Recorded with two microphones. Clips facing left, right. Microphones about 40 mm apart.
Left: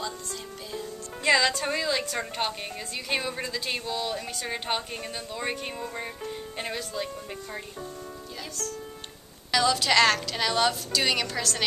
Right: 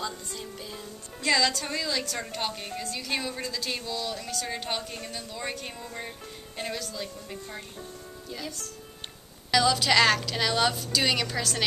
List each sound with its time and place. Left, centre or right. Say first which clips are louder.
0.0 s music: even; centre
1.2 s a woman's voice: left 3 dB; centre
9.5 s a woman's voice: even; centre